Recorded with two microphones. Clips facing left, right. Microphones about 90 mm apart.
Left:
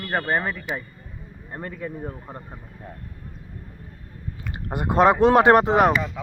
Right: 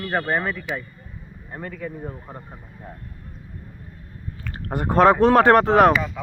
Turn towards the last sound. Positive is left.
turn(degrees=10)  # may be behind; listen again after turning